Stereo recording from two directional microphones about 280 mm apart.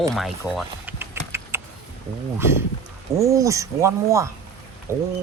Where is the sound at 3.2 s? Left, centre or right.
Centre.